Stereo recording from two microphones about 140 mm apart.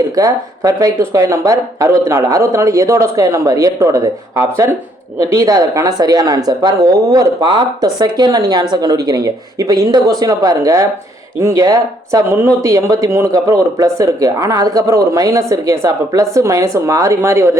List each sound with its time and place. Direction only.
0.2 s speech: 25° right (ahead or behind)